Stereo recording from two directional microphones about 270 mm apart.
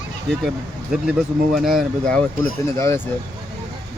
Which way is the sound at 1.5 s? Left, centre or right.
Centre.